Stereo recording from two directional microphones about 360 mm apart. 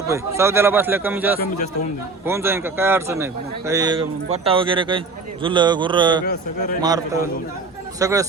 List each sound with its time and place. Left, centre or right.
0.1 s a man's voice: centre